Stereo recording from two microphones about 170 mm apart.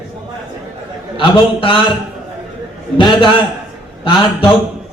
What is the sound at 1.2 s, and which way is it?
Speech, 30° left (ahead or behind).